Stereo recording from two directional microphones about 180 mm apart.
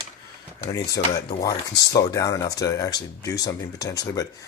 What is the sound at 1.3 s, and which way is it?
Speech, 20° left (ahead or behind).